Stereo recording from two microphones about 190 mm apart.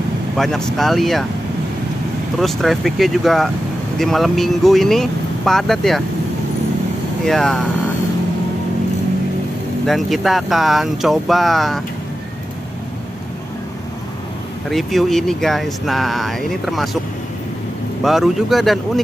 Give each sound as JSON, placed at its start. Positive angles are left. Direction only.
{"t": 0.4, "sound": "speech", "side_deg": 5}
{"t": 2.3, "sound": "speech", "side_deg": 0}
{"t": 7.2, "sound": "speech", "side_deg": 0}
{"t": 9.8, "sound": "speech", "side_deg": 0}
{"t": 14.7, "sound": "speech", "side_deg": 0}
{"t": 18.0, "sound": "speech", "side_deg": 0}